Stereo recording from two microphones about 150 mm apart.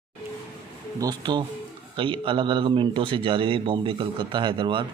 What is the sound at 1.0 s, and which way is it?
Speech, 25° right (ahead or behind).